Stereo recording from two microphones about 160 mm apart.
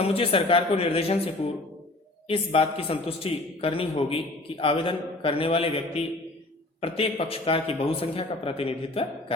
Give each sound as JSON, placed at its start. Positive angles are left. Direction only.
{"t": 0.0, "sound": "a man's voice", "side_deg": 35}